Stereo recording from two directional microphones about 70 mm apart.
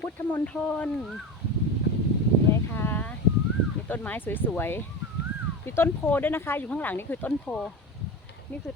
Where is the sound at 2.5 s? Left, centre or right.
Left.